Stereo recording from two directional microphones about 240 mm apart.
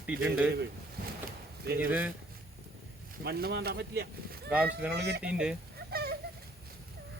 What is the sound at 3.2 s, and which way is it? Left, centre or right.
Speech, right.